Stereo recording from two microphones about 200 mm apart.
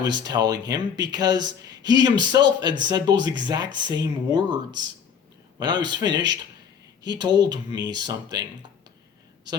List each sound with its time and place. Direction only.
0.0 s speech: 20° right (ahead or behind)